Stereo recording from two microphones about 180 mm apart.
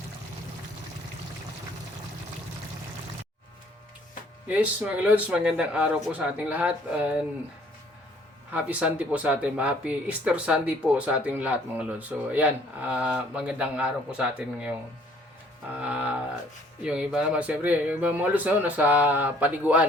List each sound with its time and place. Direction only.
4.4 s speech: 10° right (ahead or behind)
8.5 s speech: 5° right (ahead or behind)
15.8 s speech: 5° right (ahead or behind)